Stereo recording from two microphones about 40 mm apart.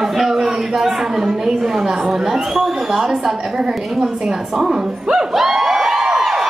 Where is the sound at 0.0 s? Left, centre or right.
Centre.